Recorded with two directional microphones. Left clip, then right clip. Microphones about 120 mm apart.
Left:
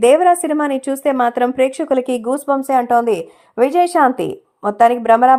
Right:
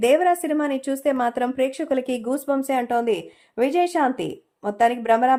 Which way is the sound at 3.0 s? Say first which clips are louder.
Left 6 dB; 30° left (ahead or behind).